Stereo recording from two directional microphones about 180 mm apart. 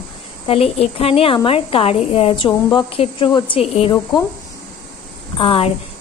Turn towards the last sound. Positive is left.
turn(degrees=30)  # may be behind; listen again after turning